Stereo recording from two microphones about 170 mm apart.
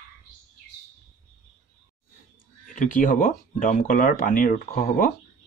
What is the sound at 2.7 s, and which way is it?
Speech, 50° left (ahead or behind).